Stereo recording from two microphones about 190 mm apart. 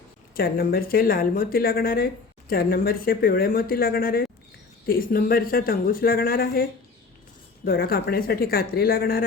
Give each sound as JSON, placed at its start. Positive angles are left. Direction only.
{"t": 0.3, "sound": "speech", "side_deg": 50}